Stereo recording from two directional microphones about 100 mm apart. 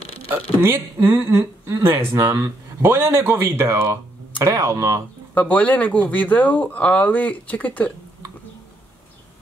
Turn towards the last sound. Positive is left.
turn(degrees=15)  # may be behind; listen again after turning